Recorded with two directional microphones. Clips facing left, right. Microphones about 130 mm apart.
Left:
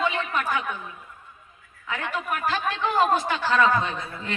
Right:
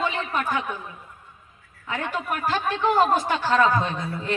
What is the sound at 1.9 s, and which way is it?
A woman's voice, 35° right (ahead or behind).